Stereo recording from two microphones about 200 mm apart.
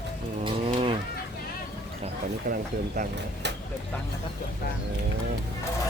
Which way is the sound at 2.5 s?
40° right (ahead or behind).